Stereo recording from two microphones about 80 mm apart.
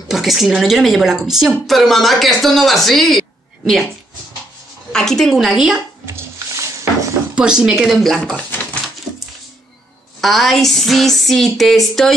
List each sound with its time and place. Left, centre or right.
0.1 s speech: centre
4.9 s speech: centre
6.0 s a sound: right
7.3 s speech: centre
10.2 s speech: centre